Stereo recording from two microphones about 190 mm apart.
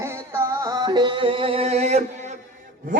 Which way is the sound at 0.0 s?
15° right (ahead or behind).